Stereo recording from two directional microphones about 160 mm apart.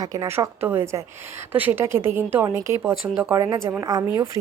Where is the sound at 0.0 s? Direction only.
20° right (ahead or behind).